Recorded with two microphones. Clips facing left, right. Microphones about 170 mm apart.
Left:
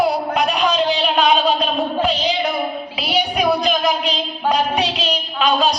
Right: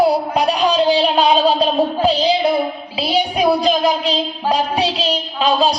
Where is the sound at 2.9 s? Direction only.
30° right (ahead or behind).